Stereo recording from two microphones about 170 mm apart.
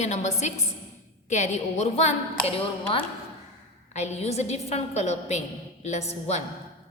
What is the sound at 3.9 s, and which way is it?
A woman's voice, 40° left (ahead or behind).